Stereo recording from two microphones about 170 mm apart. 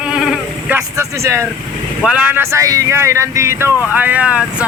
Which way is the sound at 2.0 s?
5° right (ahead or behind).